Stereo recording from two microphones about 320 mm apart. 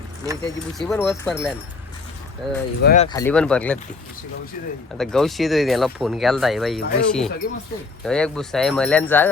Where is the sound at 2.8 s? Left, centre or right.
Left.